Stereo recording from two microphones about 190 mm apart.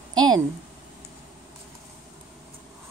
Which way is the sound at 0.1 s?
20° right (ahead or behind).